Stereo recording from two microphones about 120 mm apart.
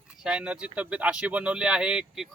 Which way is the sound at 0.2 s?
5° right (ahead or behind).